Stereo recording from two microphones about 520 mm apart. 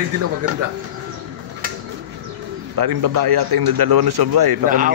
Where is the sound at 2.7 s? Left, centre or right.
Right.